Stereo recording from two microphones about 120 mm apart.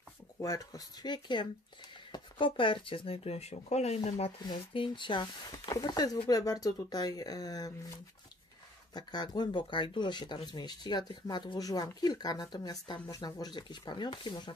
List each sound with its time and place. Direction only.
0.4 s speech: 30° left (ahead or behind); by 4.3 s 65° left (ahead or behind)
4.5 s speech: 45° left (ahead or behind)
8.9 s speech: 35° left (ahead or behind)